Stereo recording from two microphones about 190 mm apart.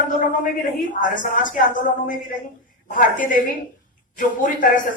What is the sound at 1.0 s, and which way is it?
A man's voice, 45° left (ahead or behind).